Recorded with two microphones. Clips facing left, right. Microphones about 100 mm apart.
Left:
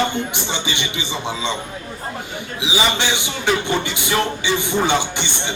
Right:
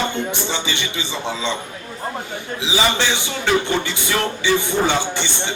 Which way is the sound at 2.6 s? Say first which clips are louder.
Right 1 dB; 15° left (ahead or behind).